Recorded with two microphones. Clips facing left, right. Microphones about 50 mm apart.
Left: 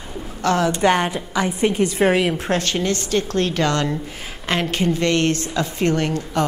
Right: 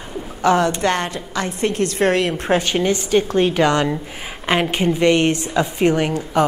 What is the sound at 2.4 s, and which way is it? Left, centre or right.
A woman's voice, centre.